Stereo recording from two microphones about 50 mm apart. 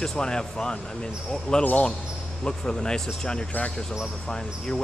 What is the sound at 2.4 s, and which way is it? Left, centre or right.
Speech, centre.